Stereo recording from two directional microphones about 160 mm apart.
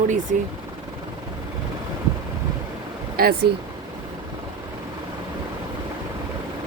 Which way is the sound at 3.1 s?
70° right (ahead or behind).